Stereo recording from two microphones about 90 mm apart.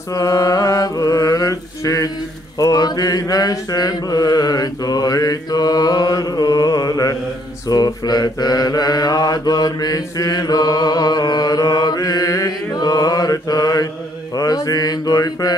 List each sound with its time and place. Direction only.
0.1 s mantra: 40° left (ahead or behind)